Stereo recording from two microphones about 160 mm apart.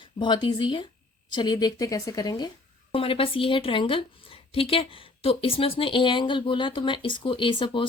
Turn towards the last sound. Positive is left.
turn(degrees=30)  # may be behind; listen again after turning